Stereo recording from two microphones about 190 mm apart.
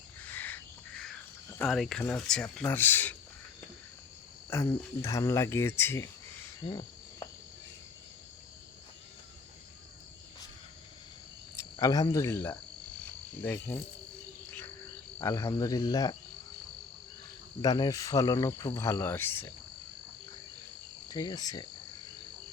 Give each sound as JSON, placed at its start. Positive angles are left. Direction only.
{"t": 0.3, "sound": "cricket", "side_deg": 10}
{"t": 4.4, "sound": "speech", "side_deg": 15}
{"t": 6.7, "sound": "cricket", "side_deg": 20}
{"t": 11.5, "sound": "cricket", "side_deg": 20}
{"t": 13.4, "sound": "speech", "side_deg": 10}
{"t": 15.2, "sound": "cricket", "side_deg": 15}
{"t": 17.6, "sound": "speech", "side_deg": 20}
{"t": 21.1, "sound": "cricket", "side_deg": 20}